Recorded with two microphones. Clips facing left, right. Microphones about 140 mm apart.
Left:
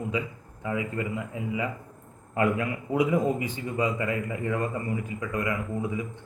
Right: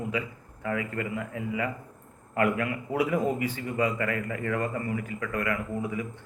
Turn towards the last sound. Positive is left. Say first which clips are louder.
# left 1 dB
turn(degrees=20)  # may be behind; listen again after turning